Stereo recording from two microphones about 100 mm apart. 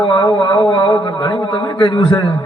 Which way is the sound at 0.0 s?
50° left (ahead or behind).